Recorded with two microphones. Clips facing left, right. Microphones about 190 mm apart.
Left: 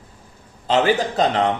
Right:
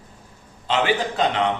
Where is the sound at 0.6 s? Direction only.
40° left (ahead or behind).